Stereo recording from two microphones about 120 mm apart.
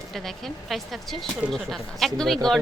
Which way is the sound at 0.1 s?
5° left (ahead or behind).